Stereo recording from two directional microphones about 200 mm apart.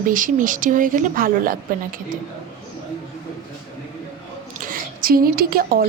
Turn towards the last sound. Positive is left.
turn(degrees=-50)  # may be behind; listen again after turning